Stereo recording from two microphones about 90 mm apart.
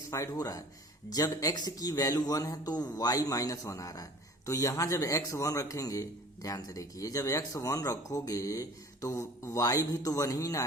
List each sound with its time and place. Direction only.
0.1 s speech: 40° left (ahead or behind)